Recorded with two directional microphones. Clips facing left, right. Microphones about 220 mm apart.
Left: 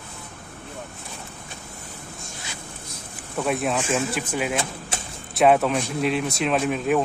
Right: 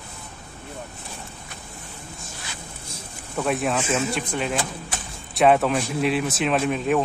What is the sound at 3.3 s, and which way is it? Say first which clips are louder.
Speech: even; centre (ahead or behind).